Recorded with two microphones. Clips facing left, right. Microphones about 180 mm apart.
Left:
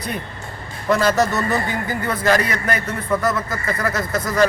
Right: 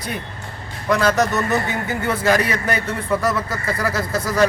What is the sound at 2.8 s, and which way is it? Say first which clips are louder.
A man's voice: even; 10° right (ahead or behind).